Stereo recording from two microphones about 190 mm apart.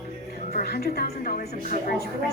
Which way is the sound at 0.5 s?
55° left (ahead or behind).